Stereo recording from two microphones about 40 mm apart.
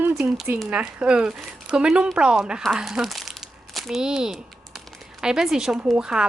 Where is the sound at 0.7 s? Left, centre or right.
Right.